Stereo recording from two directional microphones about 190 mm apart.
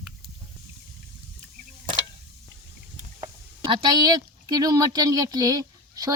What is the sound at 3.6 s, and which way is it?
A woman's voice, 20° right (ahead or behind).